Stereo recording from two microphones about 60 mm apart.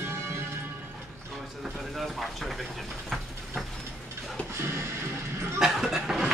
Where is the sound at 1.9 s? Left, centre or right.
Centre.